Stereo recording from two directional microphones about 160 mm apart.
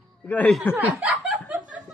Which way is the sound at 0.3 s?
10° left (ahead or behind).